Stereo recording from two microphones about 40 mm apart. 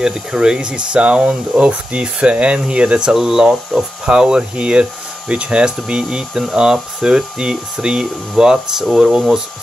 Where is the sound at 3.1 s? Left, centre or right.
Centre.